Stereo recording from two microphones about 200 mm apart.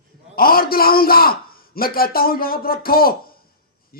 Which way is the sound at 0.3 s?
50° left (ahead or behind).